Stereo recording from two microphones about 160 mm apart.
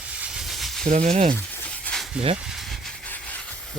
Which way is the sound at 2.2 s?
5° right (ahead or behind).